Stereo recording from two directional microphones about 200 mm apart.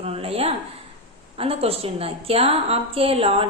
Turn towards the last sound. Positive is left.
turn(degrees=-30)  # may be behind; listen again after turning